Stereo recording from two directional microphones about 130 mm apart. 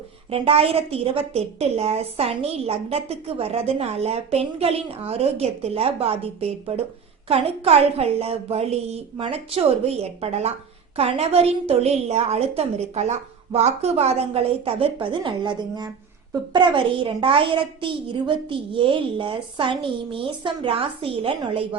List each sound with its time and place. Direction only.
0.3 s a woman's voice: 45° right (ahead or behind)